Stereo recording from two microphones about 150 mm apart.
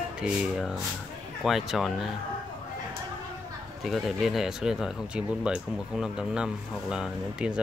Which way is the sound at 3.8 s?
Centre (ahead or behind).